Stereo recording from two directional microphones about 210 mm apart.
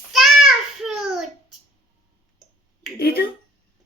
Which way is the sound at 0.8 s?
Centre (ahead or behind).